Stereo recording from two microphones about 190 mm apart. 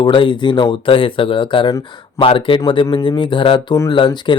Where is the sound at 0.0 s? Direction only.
25° left (ahead or behind).